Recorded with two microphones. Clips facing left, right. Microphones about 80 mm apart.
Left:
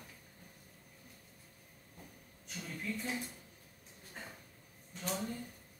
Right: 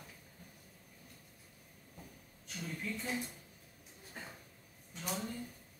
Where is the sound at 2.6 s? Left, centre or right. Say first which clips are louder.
Even; centre.